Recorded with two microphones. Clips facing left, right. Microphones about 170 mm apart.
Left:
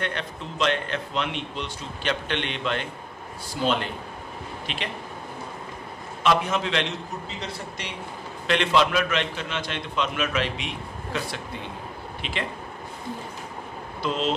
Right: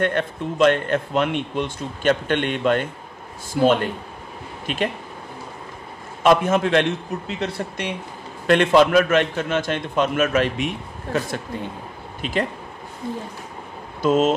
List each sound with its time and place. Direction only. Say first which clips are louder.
0.0 s a man's voice: right 9 dB; 50° right (ahead or behind)
6.2 s a man's voice: right 6 dB; 50° right (ahead or behind)
14.0 s a man's voice: right 9 dB; 45° right (ahead or behind)